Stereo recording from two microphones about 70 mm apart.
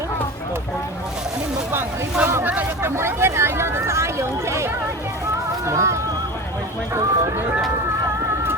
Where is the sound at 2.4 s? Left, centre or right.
Right.